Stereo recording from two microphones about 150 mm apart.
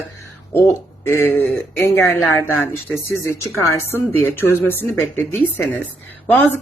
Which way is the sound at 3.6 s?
20° left (ahead or behind).